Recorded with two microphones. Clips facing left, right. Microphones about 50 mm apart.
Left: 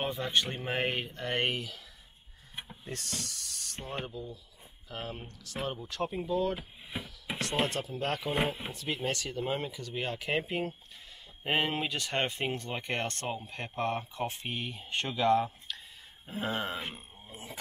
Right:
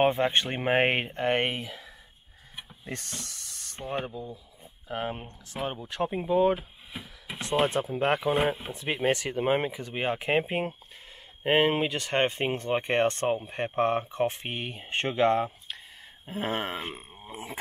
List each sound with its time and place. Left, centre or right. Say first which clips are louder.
0.0 s speech: right 7 dB; right
2.8 s speech: right 2 dB; right
6.0 s speech: right 7 dB; right
16.3 s a sound: right 3 dB; right